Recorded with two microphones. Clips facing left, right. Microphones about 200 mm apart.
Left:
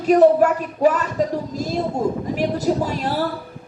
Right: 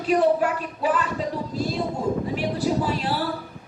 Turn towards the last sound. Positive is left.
turn(degrees=45)  # may be behind; listen again after turning